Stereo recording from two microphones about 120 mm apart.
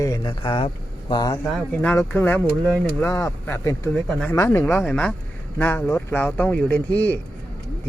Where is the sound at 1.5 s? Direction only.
10° left (ahead or behind).